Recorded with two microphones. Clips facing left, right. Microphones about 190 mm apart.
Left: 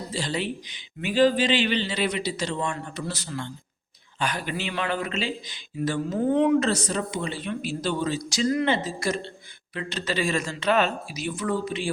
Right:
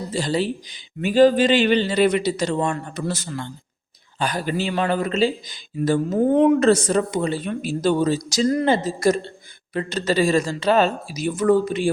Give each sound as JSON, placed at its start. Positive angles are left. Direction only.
{"t": 0.1, "sound": "a man's voice", "side_deg": -40}